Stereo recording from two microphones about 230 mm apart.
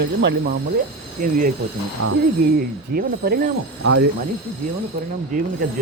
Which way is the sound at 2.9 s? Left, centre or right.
Right.